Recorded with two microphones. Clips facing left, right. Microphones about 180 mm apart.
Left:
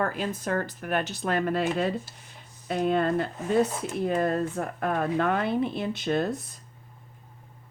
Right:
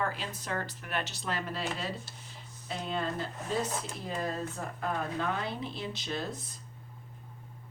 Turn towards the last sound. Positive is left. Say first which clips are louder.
# left 9 dB
turn(degrees=60)  # may be behind; listen again after turning